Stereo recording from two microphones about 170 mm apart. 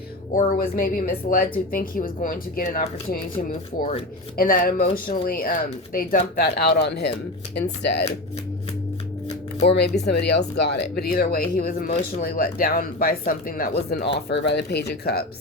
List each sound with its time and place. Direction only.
0.3 s speech: 55° left (ahead or behind)
3.8 s speech: 40° left (ahead or behind)
4.4 s speech: 55° left (ahead or behind); by 8.0 s 85° left
9.6 s speech: 75° left (ahead or behind)
14.3 s speech: 85° left; by 15.3 s 70° left (ahead or behind)